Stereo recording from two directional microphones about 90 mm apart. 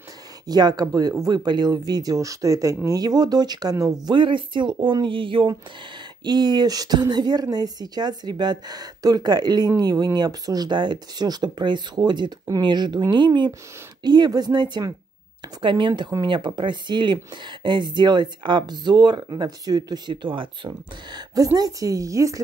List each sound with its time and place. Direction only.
0.5 s a woman's voice: 50° right (ahead or behind)
4.0 s speech: 65° right (ahead or behind)
6.2 s a woman's voice: 55° right (ahead or behind)
15.6 s speech: 65° right (ahead or behind); by 22.4 s 35° right (ahead or behind)